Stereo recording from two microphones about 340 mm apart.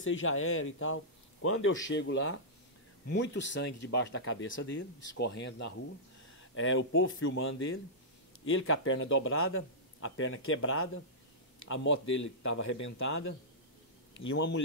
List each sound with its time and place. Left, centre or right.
0.0 s a man's voice: left
12.5 s speech: left
14.3 s speech: left